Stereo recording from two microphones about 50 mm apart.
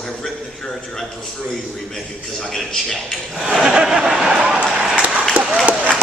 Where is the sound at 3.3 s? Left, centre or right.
Centre.